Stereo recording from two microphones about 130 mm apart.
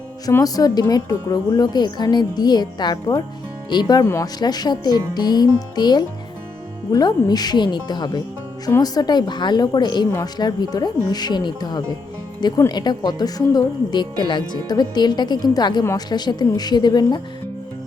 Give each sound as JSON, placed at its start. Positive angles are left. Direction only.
{"t": 0.3, "sound": "a woman's voice", "side_deg": 30}